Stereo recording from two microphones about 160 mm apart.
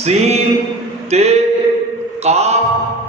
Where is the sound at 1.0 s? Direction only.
40° right (ahead or behind).